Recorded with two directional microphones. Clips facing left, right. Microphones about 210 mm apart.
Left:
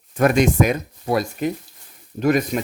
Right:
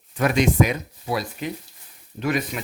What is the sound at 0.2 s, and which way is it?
Speech, 50° left (ahead or behind).